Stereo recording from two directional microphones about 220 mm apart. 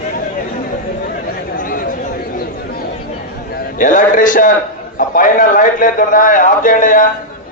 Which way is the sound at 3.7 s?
35° left (ahead or behind).